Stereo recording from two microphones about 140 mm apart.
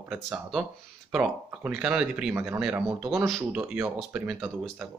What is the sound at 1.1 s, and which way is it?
Speech, 5° right (ahead or behind).